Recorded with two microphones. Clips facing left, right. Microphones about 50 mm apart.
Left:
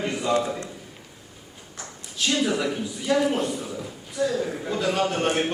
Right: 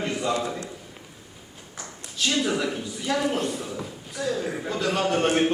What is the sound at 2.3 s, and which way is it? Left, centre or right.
A man's voice, centre.